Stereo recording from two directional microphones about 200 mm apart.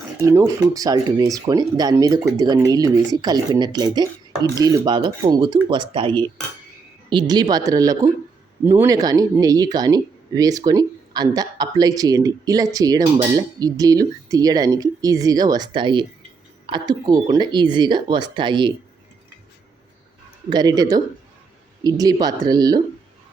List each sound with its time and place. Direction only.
0.2 s speech: 15° right (ahead or behind)
20.5 s speech: 20° right (ahead or behind)